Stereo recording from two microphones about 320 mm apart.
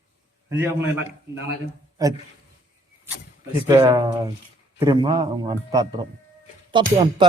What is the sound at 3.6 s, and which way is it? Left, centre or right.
Speech, centre.